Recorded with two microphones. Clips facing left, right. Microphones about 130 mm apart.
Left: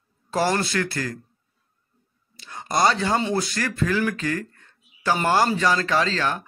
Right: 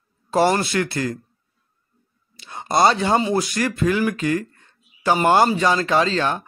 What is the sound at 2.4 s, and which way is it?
Speech, 20° right (ahead or behind).